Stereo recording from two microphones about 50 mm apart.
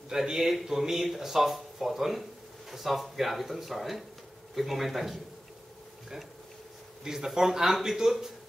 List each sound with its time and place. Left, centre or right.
0.1 s speech: centre
7.1 s a man's voice: centre